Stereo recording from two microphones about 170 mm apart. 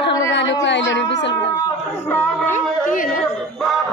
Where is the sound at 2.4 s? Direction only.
50° left (ahead or behind).